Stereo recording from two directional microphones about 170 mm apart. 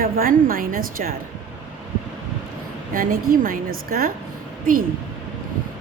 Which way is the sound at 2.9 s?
60° right (ahead or behind).